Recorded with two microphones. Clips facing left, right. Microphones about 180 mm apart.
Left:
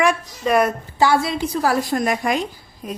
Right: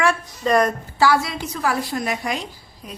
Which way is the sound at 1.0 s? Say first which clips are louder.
Left 1 dB; 25° left (ahead or behind).